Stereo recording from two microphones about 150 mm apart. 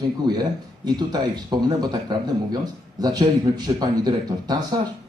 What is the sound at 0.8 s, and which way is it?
A man's voice, 30° right (ahead or behind).